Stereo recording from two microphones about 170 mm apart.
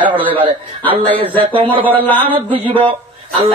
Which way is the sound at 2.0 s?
10° left (ahead or behind).